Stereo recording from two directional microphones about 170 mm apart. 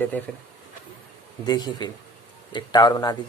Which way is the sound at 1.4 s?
25° left (ahead or behind).